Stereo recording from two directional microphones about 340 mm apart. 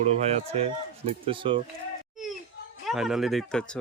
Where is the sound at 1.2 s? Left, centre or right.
Centre.